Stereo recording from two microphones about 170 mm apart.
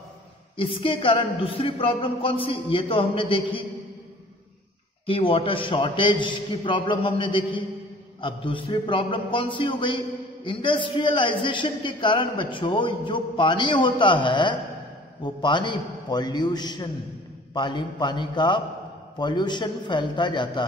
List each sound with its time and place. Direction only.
0.6 s speech: 30° left (ahead or behind)
5.0 s a man's voice: 30° left (ahead or behind)